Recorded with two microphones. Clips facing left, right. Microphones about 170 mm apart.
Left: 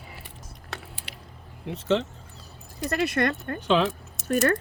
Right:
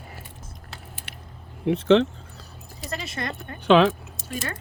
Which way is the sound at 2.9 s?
60° left (ahead or behind).